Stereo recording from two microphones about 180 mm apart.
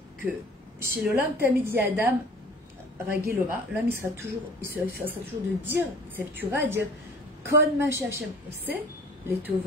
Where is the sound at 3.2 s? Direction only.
15° right (ahead or behind).